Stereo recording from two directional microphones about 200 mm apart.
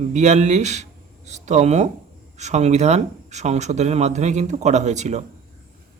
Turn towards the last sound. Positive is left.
turn(degrees=-35)  # may be behind; listen again after turning